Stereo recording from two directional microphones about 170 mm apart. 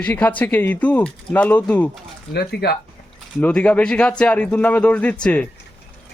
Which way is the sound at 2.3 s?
70° left (ahead or behind).